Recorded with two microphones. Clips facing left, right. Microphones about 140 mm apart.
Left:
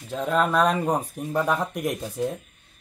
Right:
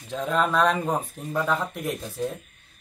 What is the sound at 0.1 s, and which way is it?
A man's voice, 5° left (ahead or behind).